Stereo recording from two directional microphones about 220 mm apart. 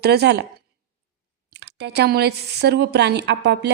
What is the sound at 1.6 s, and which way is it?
Speech, 50° right (ahead or behind).